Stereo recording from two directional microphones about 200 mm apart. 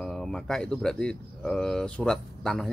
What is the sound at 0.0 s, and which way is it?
Speech, 5° left (ahead or behind).